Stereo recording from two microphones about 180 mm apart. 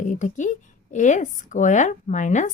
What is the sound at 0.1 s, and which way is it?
A woman's voice, 45° left (ahead or behind).